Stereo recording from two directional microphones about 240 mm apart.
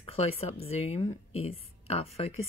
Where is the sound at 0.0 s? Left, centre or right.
Left.